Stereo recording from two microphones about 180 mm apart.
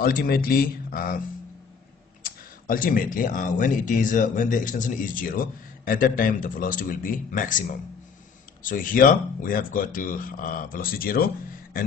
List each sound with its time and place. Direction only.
0.0 s speech: 55° left (ahead or behind)
2.2 s speech: 50° left (ahead or behind)